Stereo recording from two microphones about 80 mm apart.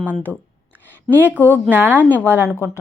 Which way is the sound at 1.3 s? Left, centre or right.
Left.